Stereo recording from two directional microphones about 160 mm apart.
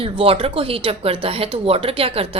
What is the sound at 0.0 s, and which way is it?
Speech, 35° right (ahead or behind).